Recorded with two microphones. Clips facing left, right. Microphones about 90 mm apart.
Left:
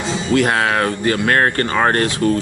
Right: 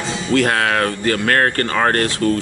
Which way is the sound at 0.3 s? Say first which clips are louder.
Even; 20° left (ahead or behind).